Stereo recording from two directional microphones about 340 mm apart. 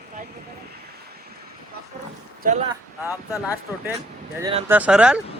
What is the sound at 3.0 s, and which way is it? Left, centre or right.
Speech, centre.